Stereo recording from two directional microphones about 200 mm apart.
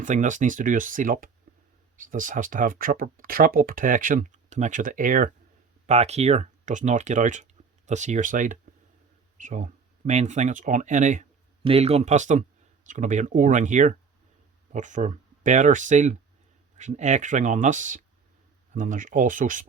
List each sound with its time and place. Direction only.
0.0 s speech: 40° right (ahead or behind)